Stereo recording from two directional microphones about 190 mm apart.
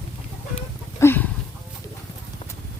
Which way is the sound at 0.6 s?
10° left (ahead or behind).